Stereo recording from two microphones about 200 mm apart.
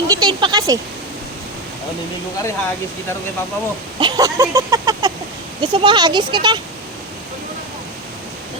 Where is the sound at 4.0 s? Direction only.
20° right (ahead or behind).